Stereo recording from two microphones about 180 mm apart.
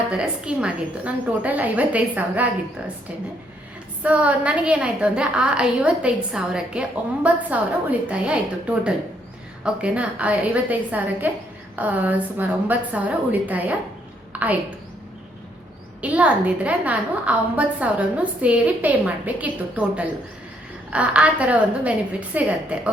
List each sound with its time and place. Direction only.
0.1 s a woman's voice: 5° right (ahead or behind)
4.0 s a woman's voice: 5° right (ahead or behind)
9.6 s a woman's voice: 5° right (ahead or behind)
16.0 s a woman's voice: 10° right (ahead or behind)